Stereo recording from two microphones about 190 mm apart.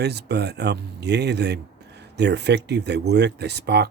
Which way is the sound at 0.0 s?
60° right (ahead or behind).